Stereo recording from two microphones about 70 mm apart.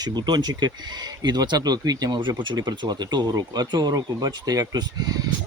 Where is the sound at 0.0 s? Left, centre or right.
Right.